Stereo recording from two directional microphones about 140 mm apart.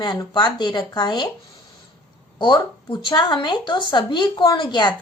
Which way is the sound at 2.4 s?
35° left (ahead or behind).